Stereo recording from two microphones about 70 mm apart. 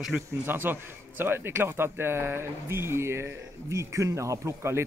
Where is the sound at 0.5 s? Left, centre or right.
Right.